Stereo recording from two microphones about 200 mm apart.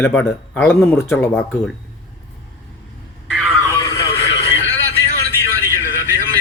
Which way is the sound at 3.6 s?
15° left (ahead or behind).